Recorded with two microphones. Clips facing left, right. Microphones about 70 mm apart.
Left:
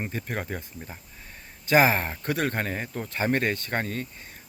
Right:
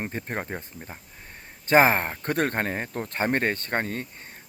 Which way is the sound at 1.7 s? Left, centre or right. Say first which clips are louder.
Right 2 dB; right.